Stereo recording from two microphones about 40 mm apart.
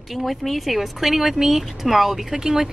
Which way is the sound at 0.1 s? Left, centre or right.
Centre.